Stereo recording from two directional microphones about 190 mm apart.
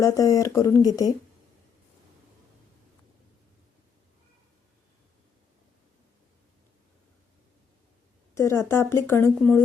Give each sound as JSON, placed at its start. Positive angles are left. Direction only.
{"t": 0.0, "sound": "speech", "side_deg": 15}
{"t": 8.4, "sound": "speech", "side_deg": 15}